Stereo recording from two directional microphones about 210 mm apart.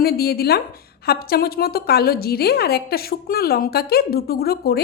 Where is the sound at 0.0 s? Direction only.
45° left (ahead or behind).